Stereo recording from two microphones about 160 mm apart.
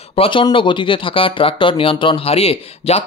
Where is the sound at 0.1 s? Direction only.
35° left (ahead or behind).